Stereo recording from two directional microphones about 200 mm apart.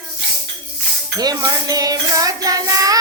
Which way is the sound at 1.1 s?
20° right (ahead or behind).